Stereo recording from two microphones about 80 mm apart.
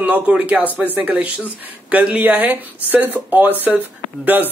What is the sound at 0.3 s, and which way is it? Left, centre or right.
A man's voice, centre.